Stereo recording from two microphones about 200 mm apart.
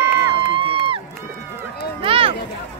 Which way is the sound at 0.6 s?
25° right (ahead or behind).